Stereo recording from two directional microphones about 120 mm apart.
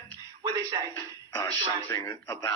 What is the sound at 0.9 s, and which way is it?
Speech, 30° left (ahead or behind).